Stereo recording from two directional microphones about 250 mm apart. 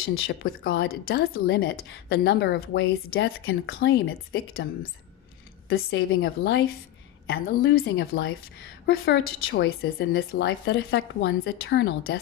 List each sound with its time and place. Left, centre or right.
0.0 s a woman's voice: left
5.7 s a woman's voice: left